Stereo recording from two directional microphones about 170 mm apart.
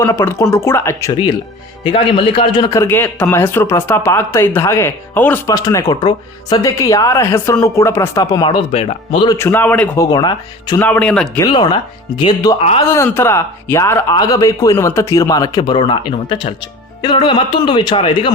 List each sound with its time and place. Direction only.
0.0 s a man's voice: 15° left (ahead or behind)
1.8 s a man's voice: 30° left (ahead or behind); by 5.5 s 10° left (ahead or behind)
5.5 s speech: 20° left (ahead or behind)
9.4 s a man's voice: 10° left (ahead or behind)
10.1 s speech: 25° left (ahead or behind)
10.8 s a man's voice: 10° left (ahead or behind)
11.3 s speech: 25° left (ahead or behind)
12.5 s speech: 35° left (ahead or behind)
12.9 s speech: 15° left (ahead or behind)